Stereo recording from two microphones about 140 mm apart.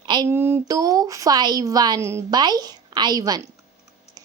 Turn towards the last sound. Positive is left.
turn(degrees=-30)  # may be behind; listen again after turning